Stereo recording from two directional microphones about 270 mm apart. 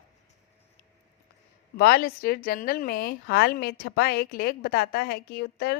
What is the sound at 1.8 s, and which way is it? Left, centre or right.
A woman's voice, left.